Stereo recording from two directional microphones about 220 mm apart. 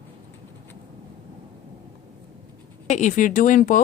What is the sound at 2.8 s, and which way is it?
Speech, 30° left (ahead or behind).